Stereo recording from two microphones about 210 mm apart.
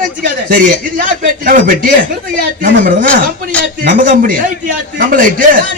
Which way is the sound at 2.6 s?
40° right (ahead or behind).